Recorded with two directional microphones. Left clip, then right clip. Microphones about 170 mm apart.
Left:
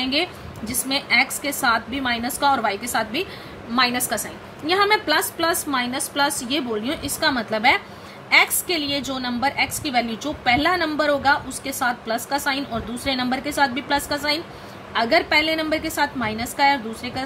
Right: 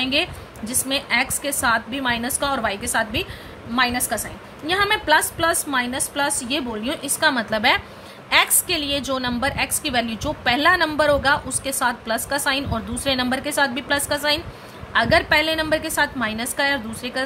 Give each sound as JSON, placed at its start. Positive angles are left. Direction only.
{"t": 0.0, "sound": "a woman's voice", "side_deg": -20}
{"t": 3.7, "sound": "a woman's voice", "side_deg": -5}
{"t": 4.6, "sound": "a woman's voice", "side_deg": -15}